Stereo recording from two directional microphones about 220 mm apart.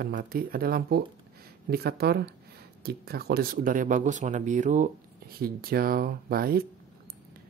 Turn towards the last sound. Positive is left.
turn(degrees=-40)  # may be behind; listen again after turning